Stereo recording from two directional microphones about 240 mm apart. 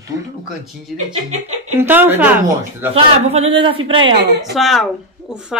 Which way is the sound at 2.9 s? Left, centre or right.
Right.